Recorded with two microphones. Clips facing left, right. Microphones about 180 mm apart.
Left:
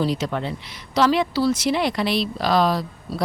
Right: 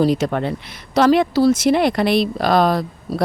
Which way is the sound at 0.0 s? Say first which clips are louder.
Right 6 dB; 50° right (ahead or behind).